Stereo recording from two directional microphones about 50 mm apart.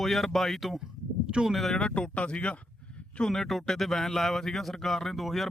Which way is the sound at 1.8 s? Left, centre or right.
Centre.